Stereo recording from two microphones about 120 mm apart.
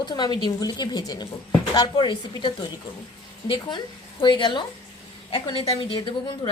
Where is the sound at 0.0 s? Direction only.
40° left (ahead or behind).